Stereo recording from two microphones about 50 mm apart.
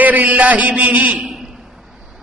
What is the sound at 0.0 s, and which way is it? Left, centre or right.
A man's voice, right.